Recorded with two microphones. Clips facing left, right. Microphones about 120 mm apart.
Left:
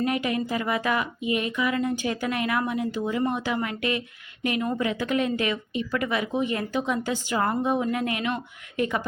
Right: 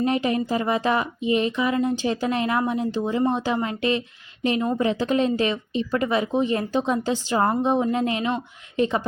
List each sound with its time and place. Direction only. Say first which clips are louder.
0.0 s a woman's voice: right 3 dB; 30° right (ahead or behind)